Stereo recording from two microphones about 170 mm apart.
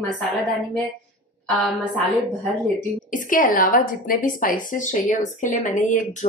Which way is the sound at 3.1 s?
50° left (ahead or behind).